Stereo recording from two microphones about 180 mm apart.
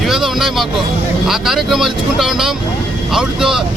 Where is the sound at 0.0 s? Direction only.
Centre (ahead or behind).